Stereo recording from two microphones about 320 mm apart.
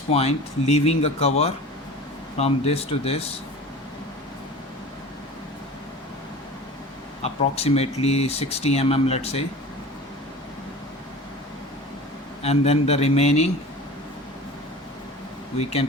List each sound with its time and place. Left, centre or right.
0.1 s speech: centre
7.2 s speech: centre
12.4 s speech: centre
15.5 s speech: centre